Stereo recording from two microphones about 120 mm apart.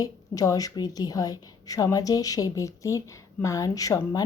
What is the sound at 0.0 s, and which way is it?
A woman's voice, 30° left (ahead or behind).